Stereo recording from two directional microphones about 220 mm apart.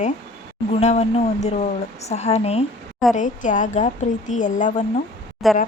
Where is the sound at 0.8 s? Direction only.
30° left (ahead or behind).